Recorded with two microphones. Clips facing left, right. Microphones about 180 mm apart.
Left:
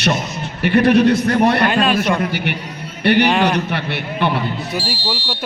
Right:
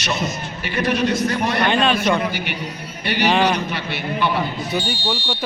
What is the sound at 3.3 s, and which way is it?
Speech, centre (ahead or behind).